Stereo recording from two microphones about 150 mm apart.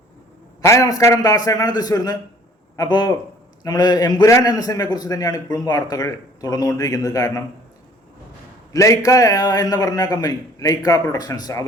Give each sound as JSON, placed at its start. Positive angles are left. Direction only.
{"t": 0.6, "sound": "a man's voice", "side_deg": 20}
{"t": 8.7, "sound": "a man's voice", "side_deg": 20}